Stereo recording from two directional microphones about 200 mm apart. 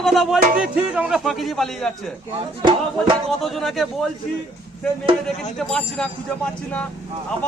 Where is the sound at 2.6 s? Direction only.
25° right (ahead or behind).